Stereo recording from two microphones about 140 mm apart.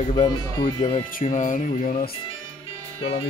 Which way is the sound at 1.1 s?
65° left (ahead or behind).